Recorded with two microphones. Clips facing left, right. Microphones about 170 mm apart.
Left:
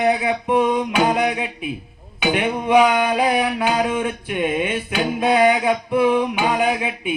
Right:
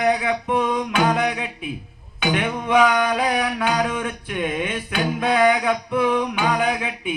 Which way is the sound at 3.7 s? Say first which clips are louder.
Left 2 dB; 25° left (ahead or behind).